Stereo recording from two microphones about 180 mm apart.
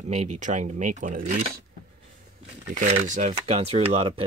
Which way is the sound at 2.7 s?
45° right (ahead or behind).